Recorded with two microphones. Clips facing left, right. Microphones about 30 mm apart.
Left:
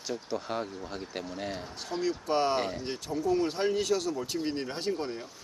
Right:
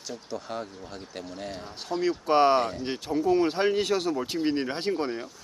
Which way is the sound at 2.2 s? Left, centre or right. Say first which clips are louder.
Right 8 dB; right.